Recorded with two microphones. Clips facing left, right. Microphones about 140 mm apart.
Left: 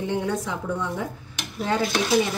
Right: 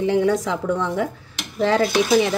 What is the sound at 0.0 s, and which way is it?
A woman's voice, 90° right.